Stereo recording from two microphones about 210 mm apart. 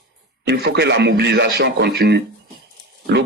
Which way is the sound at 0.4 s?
50° right (ahead or behind).